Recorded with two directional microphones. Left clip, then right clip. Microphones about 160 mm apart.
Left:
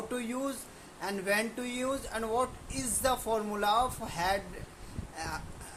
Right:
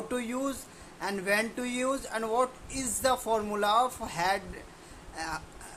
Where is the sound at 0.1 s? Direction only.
20° right (ahead or behind).